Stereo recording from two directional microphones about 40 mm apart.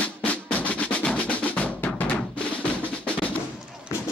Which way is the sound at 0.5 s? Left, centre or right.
Left.